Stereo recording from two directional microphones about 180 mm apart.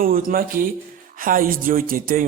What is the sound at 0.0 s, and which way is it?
Speech, 50° right (ahead or behind).